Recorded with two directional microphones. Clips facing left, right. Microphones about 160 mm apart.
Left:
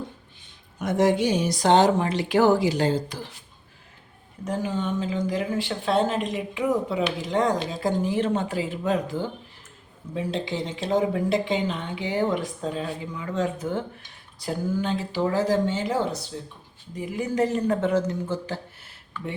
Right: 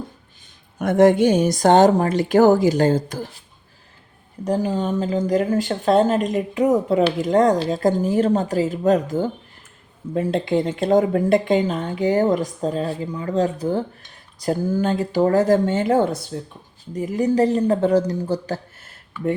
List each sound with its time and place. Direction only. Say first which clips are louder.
0.8 s speech: right 7 dB; 55° right (ahead or behind)
4.4 s speech: right 6 dB; 35° right (ahead or behind); by 16.5 s 60° right (ahead or behind)
16.9 s speech: right 8 dB; 45° right (ahead or behind)